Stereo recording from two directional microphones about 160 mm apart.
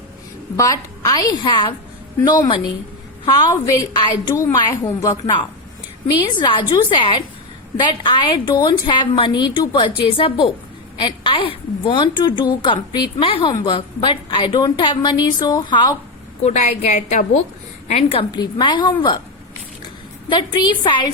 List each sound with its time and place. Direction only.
0.5 s a woman's voice: 20° left (ahead or behind)
6.4 s a woman's voice: 30° left (ahead or behind)
16.4 s a woman's voice: 45° left (ahead or behind); by 19.1 s 30° left (ahead or behind)
20.3 s a woman's voice: 30° left (ahead or behind)